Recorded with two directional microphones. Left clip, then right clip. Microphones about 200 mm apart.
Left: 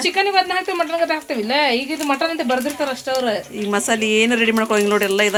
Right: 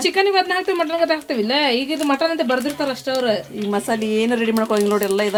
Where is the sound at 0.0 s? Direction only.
60° right (ahead or behind).